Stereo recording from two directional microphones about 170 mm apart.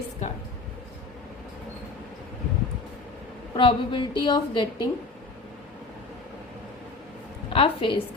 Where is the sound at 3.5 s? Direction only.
30° left (ahead or behind).